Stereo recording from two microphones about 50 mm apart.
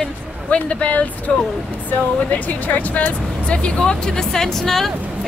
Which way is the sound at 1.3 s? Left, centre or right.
Centre.